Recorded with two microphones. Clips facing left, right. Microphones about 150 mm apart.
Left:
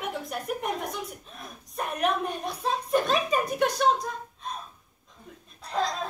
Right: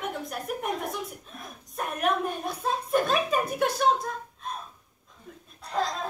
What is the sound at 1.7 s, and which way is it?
A woman's voice, centre (ahead or behind).